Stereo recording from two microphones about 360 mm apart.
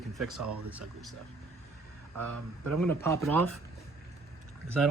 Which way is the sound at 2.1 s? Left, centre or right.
Right.